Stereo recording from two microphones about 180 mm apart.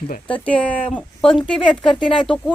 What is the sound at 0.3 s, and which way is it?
Speech, 5° left (ahead or behind).